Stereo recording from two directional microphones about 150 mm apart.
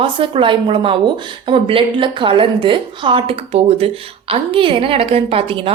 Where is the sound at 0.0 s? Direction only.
35° right (ahead or behind).